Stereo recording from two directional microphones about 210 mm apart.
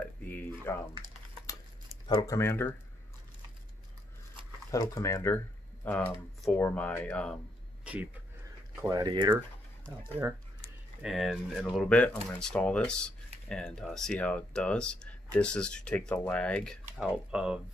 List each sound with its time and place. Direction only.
0.3 s a sound: 10° left (ahead or behind)
2.0 s speech: 15° left (ahead or behind)
4.6 s speech: 15° left (ahead or behind)
7.8 s a sound: 5° right (ahead or behind)
8.8 s speech: 15° right (ahead or behind)
11.0 s speech: centre (ahead or behind)